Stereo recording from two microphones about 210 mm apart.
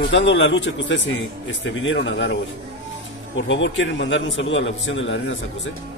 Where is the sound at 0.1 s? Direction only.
60° left (ahead or behind).